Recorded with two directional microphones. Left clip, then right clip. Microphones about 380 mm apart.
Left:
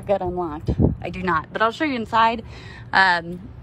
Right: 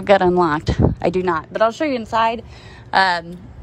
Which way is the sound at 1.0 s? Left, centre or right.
Centre.